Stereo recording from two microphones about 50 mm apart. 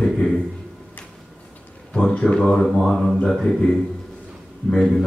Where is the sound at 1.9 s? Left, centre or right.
Centre.